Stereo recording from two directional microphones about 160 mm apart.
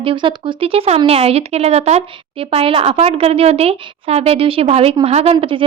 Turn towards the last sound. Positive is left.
turn(degrees=-35)  # may be behind; listen again after turning